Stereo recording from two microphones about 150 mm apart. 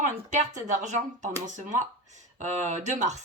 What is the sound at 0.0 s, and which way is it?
Speech, 55° right (ahead or behind).